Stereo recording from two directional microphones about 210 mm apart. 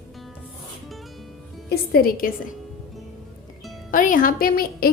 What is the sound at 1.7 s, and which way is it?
Speech, 45° left (ahead or behind).